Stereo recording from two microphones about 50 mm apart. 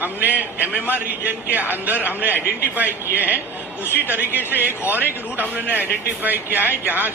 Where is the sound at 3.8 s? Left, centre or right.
Left.